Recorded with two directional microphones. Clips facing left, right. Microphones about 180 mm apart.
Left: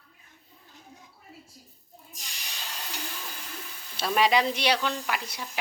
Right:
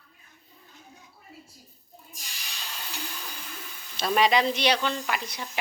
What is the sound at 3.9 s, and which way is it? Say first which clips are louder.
Speech: right 1 dB; 5° left (ahead or behind).